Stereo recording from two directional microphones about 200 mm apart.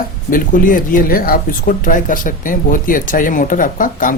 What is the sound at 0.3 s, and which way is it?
Speech, 45° left (ahead or behind).